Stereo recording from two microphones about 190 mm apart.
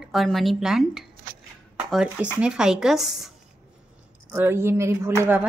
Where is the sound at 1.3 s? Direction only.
50° right (ahead or behind).